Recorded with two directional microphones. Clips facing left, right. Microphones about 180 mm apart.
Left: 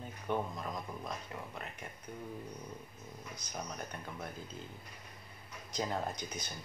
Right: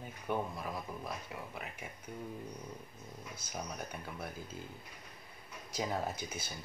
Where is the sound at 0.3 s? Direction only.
10° right (ahead or behind).